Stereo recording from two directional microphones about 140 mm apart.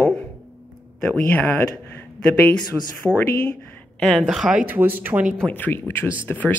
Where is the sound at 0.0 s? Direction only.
10° left (ahead or behind).